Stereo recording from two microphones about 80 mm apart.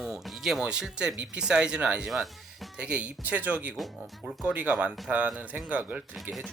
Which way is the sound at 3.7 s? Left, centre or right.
Centre.